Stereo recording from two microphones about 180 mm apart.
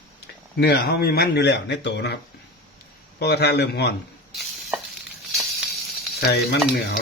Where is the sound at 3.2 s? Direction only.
65° left (ahead or behind).